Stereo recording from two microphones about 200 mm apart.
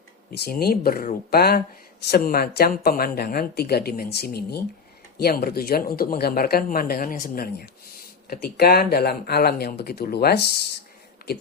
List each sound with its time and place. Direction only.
0.3 s speech: 50° left (ahead or behind)